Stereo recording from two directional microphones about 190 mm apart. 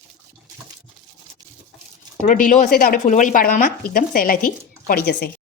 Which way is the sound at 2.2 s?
45° left (ahead or behind).